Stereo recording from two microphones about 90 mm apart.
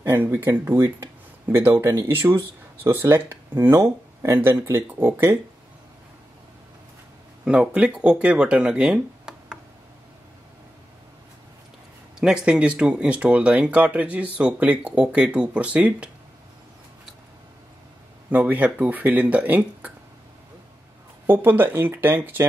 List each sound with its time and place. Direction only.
0.0 s speech: 25° right (ahead or behind)
7.4 s speech: 10° right (ahead or behind)
12.2 s speech: 10° right (ahead or behind)
18.3 s speech: 20° right (ahead or behind)
21.3 s speech: 20° right (ahead or behind)